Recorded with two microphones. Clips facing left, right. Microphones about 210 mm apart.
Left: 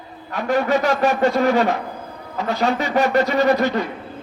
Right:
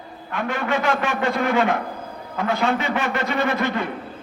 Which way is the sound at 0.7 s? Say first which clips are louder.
Left 2 dB; 40° left (ahead or behind).